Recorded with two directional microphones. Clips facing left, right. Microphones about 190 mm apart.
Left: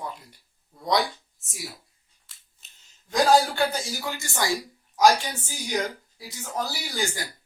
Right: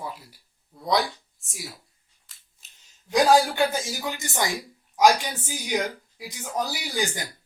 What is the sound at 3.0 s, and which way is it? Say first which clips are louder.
A man's voice: right 1 dB; 15° right (ahead or behind).